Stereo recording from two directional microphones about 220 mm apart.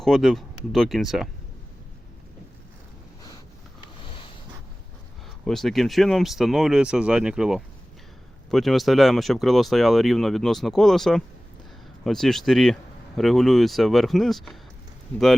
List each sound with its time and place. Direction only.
0.0 s speech: centre (ahead or behind)
4.0 s a sound: 25° left (ahead or behind)
5.5 s speech: centre (ahead or behind)